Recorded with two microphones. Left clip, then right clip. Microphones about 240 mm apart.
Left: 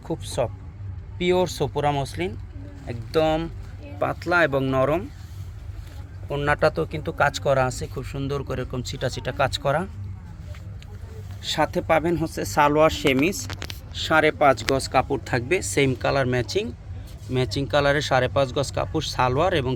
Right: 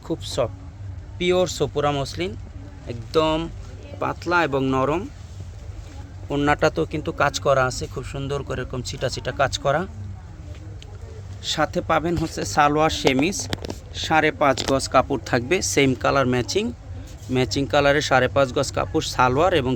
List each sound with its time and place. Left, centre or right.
0.1 s speech: centre
6.2 s speech: centre
11.4 s speech: centre